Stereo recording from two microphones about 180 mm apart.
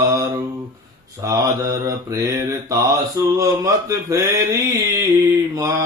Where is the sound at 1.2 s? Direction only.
20° right (ahead or behind).